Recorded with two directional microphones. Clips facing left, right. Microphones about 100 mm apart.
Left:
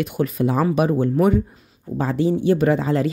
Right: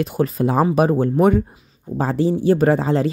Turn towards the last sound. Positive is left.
turn(degrees=-30)  # may be behind; listen again after turning